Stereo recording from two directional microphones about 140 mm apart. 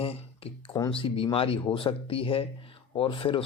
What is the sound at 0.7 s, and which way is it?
Speech, 35° left (ahead or behind).